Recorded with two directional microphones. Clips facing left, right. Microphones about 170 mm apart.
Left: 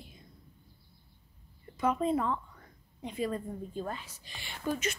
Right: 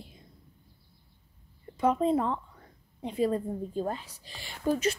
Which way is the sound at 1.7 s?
30° right (ahead or behind).